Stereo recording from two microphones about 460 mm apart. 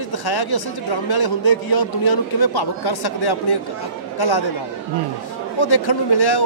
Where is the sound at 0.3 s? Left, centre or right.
Left.